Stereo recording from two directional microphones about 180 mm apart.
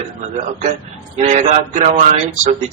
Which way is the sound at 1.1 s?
40° right (ahead or behind).